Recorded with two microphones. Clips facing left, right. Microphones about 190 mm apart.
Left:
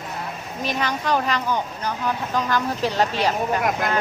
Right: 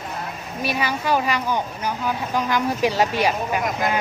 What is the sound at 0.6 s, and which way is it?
Speech, 10° right (ahead or behind).